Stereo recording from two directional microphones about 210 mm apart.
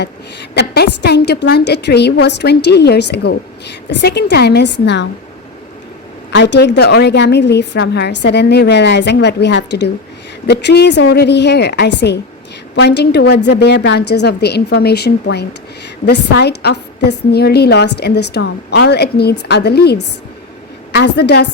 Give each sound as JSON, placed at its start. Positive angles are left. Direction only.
{"t": 0.5, "sound": "a woman's voice", "side_deg": 50}
{"t": 6.3, "sound": "a woman's voice", "side_deg": 55}